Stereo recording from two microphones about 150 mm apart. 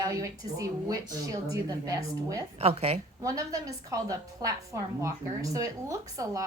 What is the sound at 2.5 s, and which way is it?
Speech, 40° right (ahead or behind).